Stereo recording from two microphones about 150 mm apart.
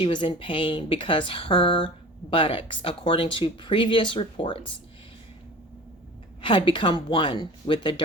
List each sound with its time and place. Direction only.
0.0 s speech: 35° left (ahead or behind)
6.4 s speech: 35° left (ahead or behind)